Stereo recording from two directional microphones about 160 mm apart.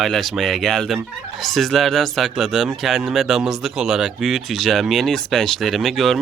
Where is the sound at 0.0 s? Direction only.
Centre (ahead or behind).